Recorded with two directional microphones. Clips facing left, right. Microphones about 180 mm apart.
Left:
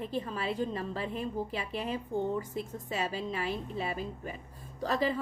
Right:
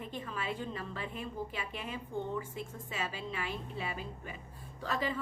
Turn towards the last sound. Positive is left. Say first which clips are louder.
# left 5 dB
turn(degrees=35)  # may be behind; listen again after turning